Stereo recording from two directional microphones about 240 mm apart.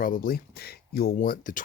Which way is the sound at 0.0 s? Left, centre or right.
Left.